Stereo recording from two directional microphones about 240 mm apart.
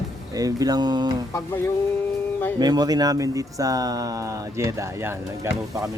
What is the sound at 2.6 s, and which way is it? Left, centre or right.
Speech, centre.